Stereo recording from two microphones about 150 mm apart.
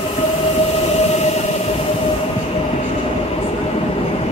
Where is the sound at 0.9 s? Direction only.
45° left (ahead or behind).